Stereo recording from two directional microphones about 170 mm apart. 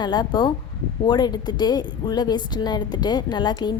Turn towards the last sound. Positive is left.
turn(degrees=25)  # may be behind; listen again after turning